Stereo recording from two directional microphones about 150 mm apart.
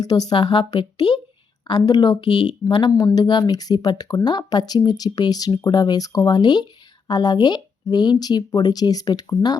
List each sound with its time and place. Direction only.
0.0 s speech: 25° left (ahead or behind)